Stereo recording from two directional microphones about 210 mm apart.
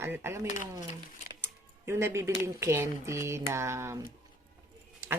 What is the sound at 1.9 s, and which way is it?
Speech, 10° right (ahead or behind).